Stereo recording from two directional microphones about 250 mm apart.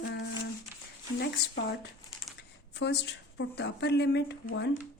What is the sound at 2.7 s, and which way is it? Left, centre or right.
Speech, left.